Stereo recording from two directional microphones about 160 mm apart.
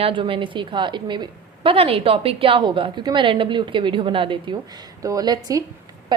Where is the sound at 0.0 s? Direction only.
35° right (ahead or behind).